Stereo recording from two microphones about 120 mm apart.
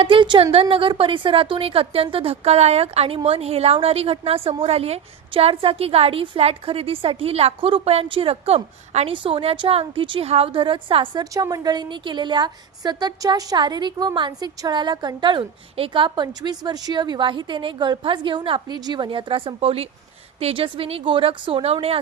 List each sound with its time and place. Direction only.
0.0 s a woman's voice: 45° right (ahead or behind); by 9.1 s 60° right (ahead or behind)
9.1 s a woman's voice: 45° right (ahead or behind)
11.2 s a woman's voice: 30° right (ahead or behind); by 21.9 s 55° right (ahead or behind)